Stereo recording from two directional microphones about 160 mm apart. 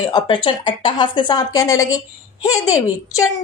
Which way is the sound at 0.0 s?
25° left (ahead or behind).